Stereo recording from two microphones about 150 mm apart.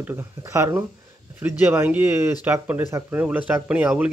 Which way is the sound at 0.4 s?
20° right (ahead or behind).